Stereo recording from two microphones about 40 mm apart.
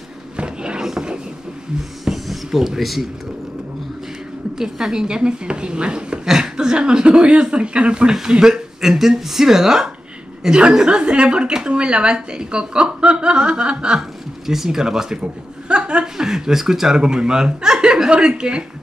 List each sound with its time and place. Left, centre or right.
0.4 s a sound: right
2.0 s a sound: centre
4.6 s speech: centre
5.0 s a woman's voice: right
8.3 s a woman's voice: centre
13.9 s speech: centre
15.7 s chuckle: right
16.3 s a woman's voice: centre